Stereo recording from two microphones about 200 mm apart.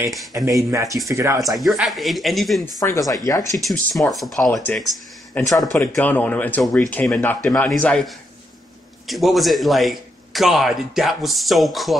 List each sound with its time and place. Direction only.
0.5 s speech: 15° right (ahead or behind)
1.4 s a man's voice: centre (ahead or behind)
2.6 s speech: 15° left (ahead or behind)
3.5 s a man's voice: centre (ahead or behind)